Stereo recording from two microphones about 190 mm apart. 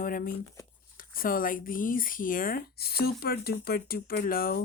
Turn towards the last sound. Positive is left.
turn(degrees=50)  # may be behind; listen again after turning